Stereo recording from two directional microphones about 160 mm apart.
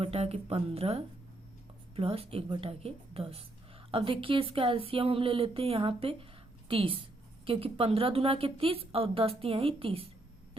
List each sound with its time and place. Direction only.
0.0 s a woman's voice: 40° right (ahead or behind)